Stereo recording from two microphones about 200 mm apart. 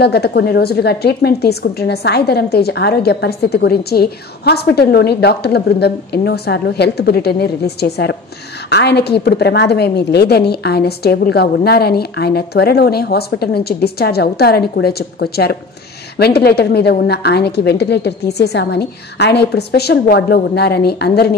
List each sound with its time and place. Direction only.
0.0 s a woman's voice: 55° left (ahead or behind)